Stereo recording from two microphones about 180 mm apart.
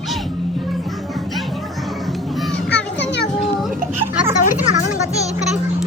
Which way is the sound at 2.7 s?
70° left (ahead or behind).